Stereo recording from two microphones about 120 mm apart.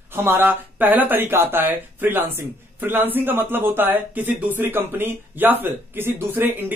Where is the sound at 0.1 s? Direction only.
20° right (ahead or behind).